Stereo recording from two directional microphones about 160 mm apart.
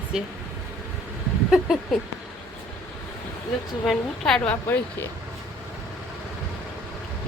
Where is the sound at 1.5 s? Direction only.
Centre (ahead or behind).